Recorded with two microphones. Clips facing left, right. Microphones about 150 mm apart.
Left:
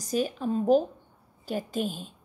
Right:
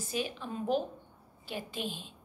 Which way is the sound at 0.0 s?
40° left (ahead or behind).